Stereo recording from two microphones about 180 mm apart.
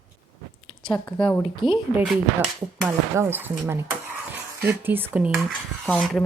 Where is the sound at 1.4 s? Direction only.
25° left (ahead or behind).